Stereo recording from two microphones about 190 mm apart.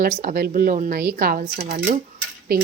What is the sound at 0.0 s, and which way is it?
Speech, 50° right (ahead or behind).